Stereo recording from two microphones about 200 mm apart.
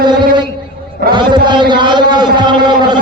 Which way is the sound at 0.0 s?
20° right (ahead or behind).